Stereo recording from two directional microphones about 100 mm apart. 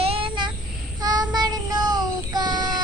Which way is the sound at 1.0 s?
40° right (ahead or behind).